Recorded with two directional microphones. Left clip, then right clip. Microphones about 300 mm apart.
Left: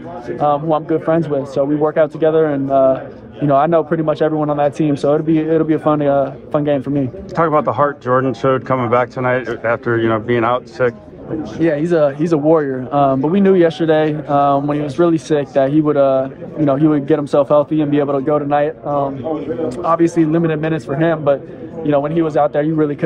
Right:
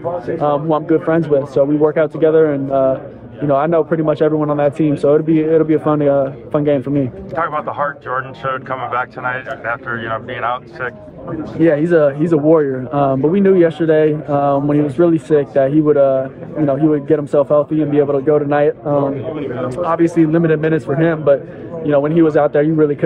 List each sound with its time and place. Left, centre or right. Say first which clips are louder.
0.4 s a man's voice: left 2 dB; centre
7.3 s speech: left 5 dB; left
11.6 s a man's voice: right 2 dB; centre